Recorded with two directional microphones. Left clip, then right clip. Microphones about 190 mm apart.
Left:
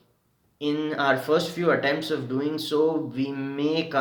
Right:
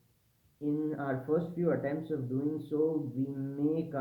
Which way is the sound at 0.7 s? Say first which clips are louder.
Left 10 dB; 10° left (ahead or behind).